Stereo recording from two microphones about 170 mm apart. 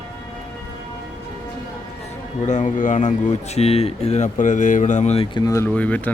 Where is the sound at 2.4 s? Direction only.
45° left (ahead or behind).